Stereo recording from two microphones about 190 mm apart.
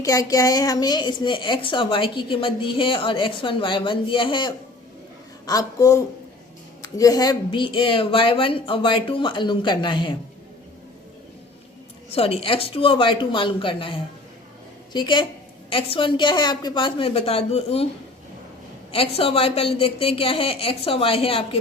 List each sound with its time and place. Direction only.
0.0 s a woman's voice: 20° left (ahead or behind)
12.1 s a woman's voice: 30° left (ahead or behind)
18.9 s a woman's voice: 30° left (ahead or behind)